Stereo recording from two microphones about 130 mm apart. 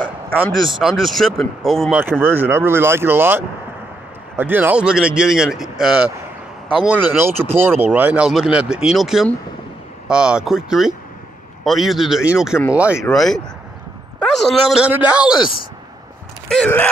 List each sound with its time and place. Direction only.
0.7 s speech: centre (ahead or behind)
2.0 s speech: 15° right (ahead or behind)
13.1 s speech: 5° left (ahead or behind)
14.4 s speech: centre (ahead or behind)
16.6 s speech: 15° left (ahead or behind)